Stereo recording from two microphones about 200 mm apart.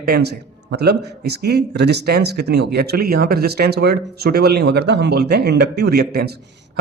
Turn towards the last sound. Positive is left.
turn(degrees=-55)  # may be behind; listen again after turning